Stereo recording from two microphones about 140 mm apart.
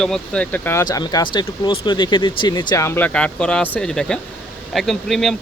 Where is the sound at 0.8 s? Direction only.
30° left (ahead or behind).